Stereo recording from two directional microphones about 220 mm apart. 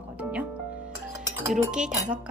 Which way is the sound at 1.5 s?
5° right (ahead or behind).